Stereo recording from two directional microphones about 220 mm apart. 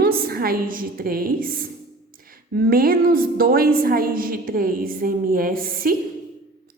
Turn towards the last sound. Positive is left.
turn(degrees=-40)  # may be behind; listen again after turning